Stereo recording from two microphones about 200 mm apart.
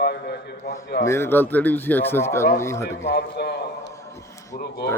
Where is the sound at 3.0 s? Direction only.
55° left (ahead or behind).